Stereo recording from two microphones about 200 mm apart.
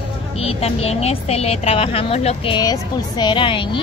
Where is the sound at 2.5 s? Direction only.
20° left (ahead or behind).